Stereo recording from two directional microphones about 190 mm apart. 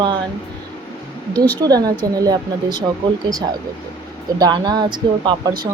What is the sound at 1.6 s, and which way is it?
Speech, 20° right (ahead or behind).